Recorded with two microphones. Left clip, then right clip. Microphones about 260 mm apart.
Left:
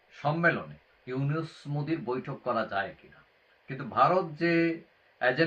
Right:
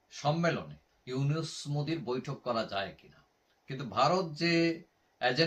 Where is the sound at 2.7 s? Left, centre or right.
Centre.